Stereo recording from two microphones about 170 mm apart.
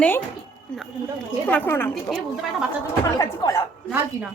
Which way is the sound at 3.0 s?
20° left (ahead or behind).